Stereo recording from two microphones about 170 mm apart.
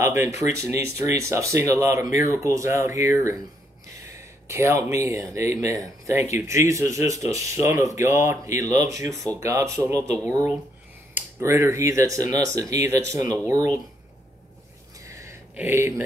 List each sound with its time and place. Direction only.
0.0 s speech: 15° right (ahead or behind)
11.1 s speech: 15° right (ahead or behind)
15.0 s a sound: 15° right (ahead or behind)